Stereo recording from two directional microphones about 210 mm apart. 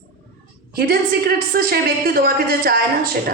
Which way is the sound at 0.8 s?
45° right (ahead or behind).